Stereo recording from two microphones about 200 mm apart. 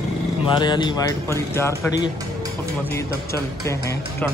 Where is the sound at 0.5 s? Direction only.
25° left (ahead or behind).